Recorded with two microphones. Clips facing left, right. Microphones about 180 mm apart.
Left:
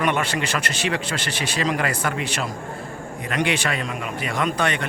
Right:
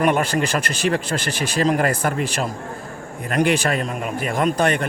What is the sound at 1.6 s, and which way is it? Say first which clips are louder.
A man's voice: right 5 dB; 45° right (ahead or behind).